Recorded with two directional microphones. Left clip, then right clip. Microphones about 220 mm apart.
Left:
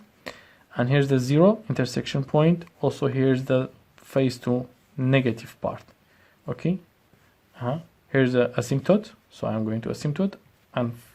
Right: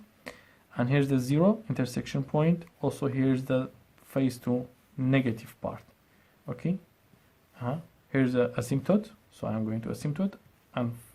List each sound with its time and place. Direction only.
0.3 s speech: 25° left (ahead or behind)